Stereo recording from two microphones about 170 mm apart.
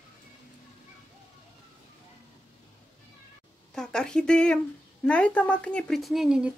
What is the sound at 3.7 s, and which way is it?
Speech, 5° left (ahead or behind).